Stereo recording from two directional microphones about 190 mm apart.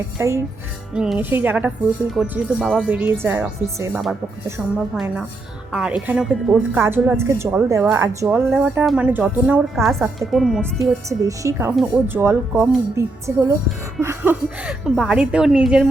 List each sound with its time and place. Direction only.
0.2 s a woman's voice: 15° right (ahead or behind)
11.1 s a woman's voice: 15° right (ahead or behind)